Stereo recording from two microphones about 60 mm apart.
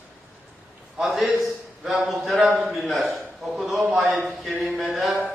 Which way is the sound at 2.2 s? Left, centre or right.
Centre.